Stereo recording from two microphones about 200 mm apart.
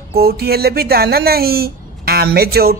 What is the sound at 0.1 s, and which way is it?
Speech, 50° right (ahead or behind).